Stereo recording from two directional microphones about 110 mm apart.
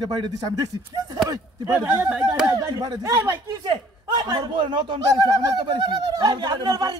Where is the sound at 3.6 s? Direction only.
45° right (ahead or behind).